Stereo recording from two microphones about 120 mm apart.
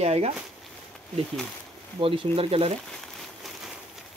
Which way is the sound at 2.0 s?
50° right (ahead or behind).